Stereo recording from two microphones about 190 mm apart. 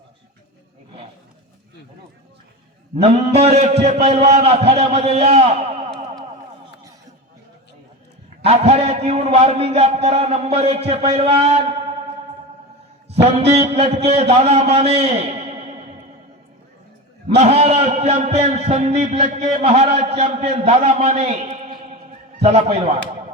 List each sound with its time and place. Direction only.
2.9 s a man's voice: 35° right (ahead or behind)
8.4 s a man's voice: 30° right (ahead or behind)
13.1 s a man's voice: 30° right (ahead or behind)
17.2 s a man's voice: 35° right (ahead or behind)
22.4 s a man's voice: 30° right (ahead or behind)